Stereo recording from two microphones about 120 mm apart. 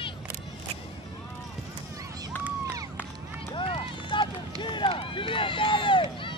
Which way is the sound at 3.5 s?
45° left (ahead or behind).